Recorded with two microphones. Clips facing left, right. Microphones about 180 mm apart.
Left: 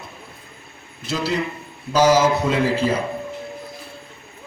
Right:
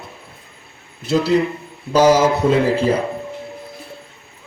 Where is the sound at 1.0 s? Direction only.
60° right (ahead or behind).